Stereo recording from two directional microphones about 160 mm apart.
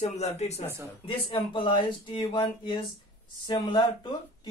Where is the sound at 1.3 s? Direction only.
30° left (ahead or behind).